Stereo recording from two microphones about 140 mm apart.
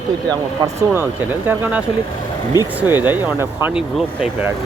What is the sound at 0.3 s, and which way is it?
Speech, 25° right (ahead or behind).